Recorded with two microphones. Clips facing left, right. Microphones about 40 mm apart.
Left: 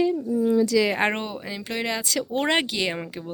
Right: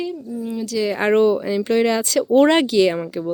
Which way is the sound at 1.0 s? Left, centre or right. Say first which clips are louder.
Right 6 dB; left.